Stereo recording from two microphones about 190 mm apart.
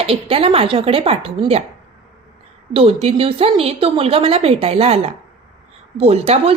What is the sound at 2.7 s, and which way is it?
A woman's voice, 30° right (ahead or behind).